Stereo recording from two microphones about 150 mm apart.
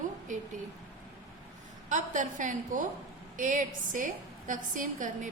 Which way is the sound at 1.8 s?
55° right (ahead or behind).